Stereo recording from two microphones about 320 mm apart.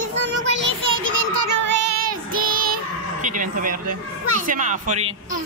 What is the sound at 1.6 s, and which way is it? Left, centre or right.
Child singing, right.